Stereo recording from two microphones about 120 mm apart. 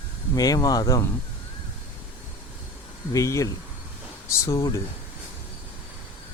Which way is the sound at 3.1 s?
30° left (ahead or behind).